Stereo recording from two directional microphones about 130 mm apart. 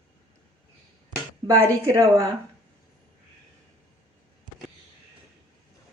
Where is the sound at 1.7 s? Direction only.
25° right (ahead or behind).